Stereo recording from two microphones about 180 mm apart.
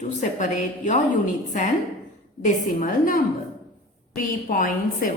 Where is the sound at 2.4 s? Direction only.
45° left (ahead or behind).